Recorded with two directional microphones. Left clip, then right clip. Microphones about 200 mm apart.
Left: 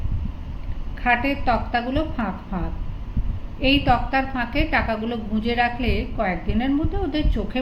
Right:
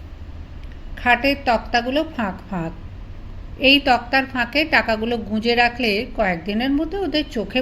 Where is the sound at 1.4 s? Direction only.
40° right (ahead or behind).